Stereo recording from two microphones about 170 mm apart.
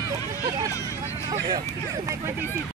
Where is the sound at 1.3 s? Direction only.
25° right (ahead or behind).